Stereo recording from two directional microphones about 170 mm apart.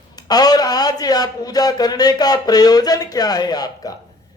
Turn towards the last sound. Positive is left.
turn(degrees=25)  # may be behind; listen again after turning